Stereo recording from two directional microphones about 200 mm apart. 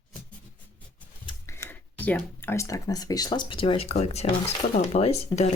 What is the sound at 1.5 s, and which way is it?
Speech, 10° left (ahead or behind).